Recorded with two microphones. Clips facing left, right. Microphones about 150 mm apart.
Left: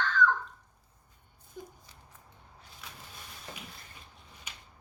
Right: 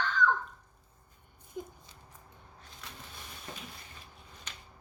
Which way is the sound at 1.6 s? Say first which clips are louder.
Right 4 dB; 15° right (ahead or behind).